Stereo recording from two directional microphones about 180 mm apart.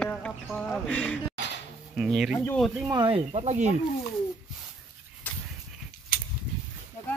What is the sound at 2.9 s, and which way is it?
Speech, 30° right (ahead or behind).